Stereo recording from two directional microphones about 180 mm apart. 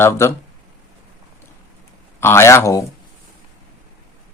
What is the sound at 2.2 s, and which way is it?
Speech, 15° left (ahead or behind).